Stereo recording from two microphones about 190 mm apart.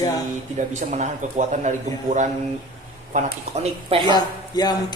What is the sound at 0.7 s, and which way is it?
A man's voice, 40° right (ahead or behind).